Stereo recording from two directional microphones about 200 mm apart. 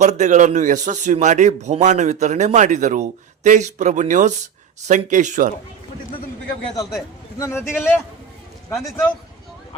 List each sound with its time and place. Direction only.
0.0 s a man's voice: 35° right (ahead or behind)
6.7 s a man's voice: 15° left (ahead or behind)